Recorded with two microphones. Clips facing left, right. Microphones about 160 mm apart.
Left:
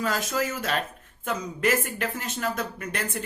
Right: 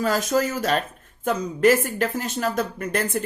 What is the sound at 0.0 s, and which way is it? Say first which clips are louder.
Speech: right 6 dB; 35° right (ahead or behind).